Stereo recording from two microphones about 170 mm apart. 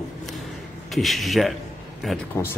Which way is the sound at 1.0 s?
Centre (ahead or behind).